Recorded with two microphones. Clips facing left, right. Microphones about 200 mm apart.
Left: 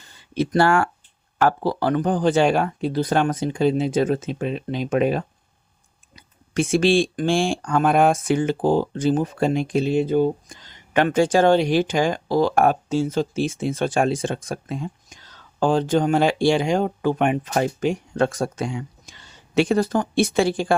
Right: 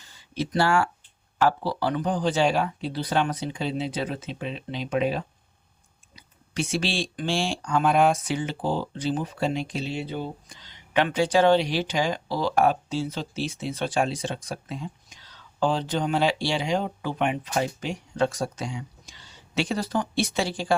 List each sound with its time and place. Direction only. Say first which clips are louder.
0.3 s speech: left 5 dB; 55° left (ahead or behind)